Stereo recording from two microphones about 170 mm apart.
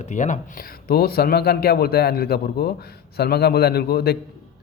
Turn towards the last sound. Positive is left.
turn(degrees=70)  # may be behind; listen again after turning